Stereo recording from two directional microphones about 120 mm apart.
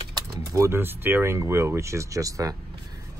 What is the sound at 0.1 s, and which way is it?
Speech, 25° right (ahead or behind).